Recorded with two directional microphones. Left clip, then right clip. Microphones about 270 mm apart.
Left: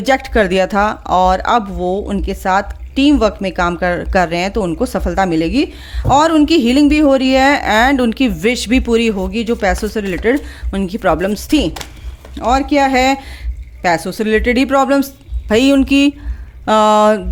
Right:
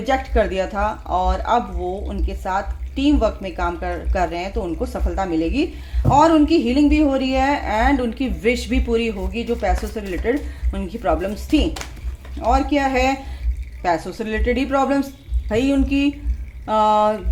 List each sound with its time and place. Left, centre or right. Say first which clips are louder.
0.0 s speech: left 6 dB; left